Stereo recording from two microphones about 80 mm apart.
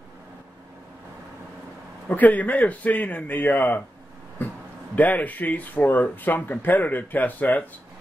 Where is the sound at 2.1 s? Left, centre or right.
Centre.